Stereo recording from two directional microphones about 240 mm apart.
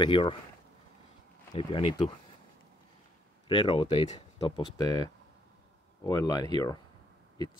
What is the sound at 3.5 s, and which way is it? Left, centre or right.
Speech, left.